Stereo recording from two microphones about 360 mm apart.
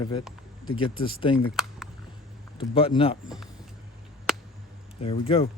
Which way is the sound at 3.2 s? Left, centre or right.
Centre.